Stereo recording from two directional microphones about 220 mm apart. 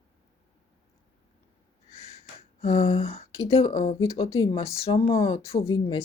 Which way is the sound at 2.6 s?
25° left (ahead or behind).